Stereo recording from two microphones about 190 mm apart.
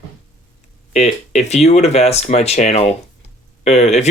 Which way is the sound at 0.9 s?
35° left (ahead or behind).